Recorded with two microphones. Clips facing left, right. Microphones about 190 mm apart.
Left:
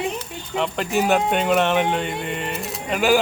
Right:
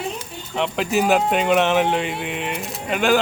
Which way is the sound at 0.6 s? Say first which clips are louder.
Right 1 dB; centre (ahead or behind).